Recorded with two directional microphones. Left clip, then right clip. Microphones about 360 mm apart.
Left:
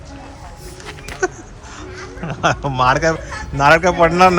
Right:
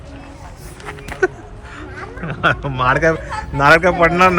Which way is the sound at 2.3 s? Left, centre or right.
Centre.